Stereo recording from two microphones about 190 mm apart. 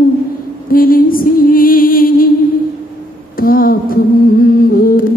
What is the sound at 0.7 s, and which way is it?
Music, 50° left (ahead or behind).